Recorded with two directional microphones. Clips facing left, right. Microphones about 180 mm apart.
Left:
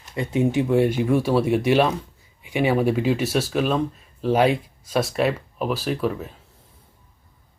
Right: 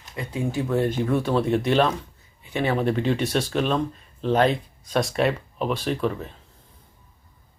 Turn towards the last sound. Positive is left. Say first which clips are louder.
# left 1 dB
turn(degrees=5)  # may be behind; listen again after turning